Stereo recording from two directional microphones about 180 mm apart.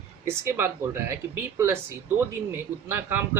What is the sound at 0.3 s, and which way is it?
A man's voice, 15° right (ahead or behind).